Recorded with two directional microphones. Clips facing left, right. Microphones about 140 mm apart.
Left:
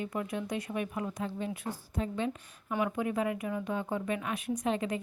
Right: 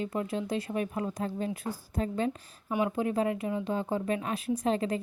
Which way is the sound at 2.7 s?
15° right (ahead or behind).